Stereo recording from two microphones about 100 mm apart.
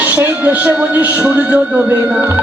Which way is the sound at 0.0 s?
15° right (ahead or behind).